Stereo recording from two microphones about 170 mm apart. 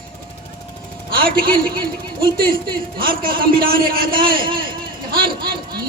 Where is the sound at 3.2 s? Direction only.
60° right (ahead or behind).